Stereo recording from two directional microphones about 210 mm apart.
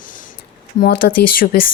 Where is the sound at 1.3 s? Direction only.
40° left (ahead or behind).